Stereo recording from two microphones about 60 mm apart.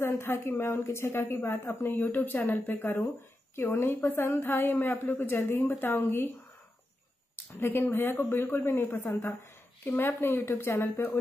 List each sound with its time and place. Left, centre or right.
0.0 s a woman's voice: left
7.6 s a woman's voice: left